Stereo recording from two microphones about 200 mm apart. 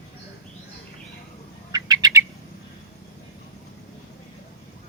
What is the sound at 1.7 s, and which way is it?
Bird, 15° right (ahead or behind).